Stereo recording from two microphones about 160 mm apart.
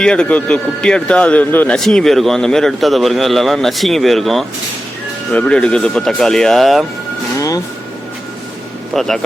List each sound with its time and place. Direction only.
0.0 s a man's voice: 5° left (ahead or behind)
7.3 s speech: 20° left (ahead or behind)
8.9 s a man's voice: centre (ahead or behind)